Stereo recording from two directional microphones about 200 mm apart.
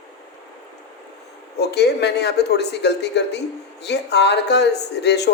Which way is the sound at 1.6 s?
55° left (ahead or behind).